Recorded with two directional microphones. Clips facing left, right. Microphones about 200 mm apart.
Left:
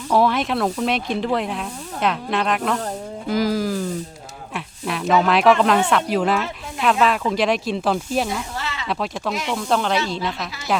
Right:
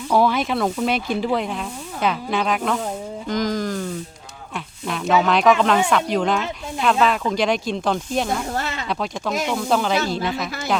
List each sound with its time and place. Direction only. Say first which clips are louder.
0.1 s speech: even; centre (ahead or behind)
3.2 s a sound: left 2 dB; 5° left (ahead or behind)
4.5 s speech: left 1 dB; centre (ahead or behind)
8.3 s snake: right 3 dB; 50° right (ahead or behind)
8.9 s speech: left 2 dB; centre (ahead or behind)